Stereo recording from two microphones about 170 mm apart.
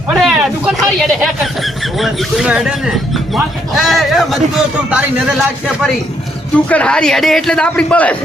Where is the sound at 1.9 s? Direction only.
Centre (ahead or behind).